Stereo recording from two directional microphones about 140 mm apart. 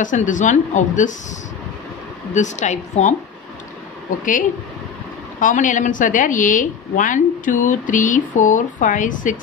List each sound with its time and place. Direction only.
0.0 s speech: 65° left (ahead or behind)
2.3 s speech: 60° left (ahead or behind)
4.2 s a woman's voice: 70° left (ahead or behind)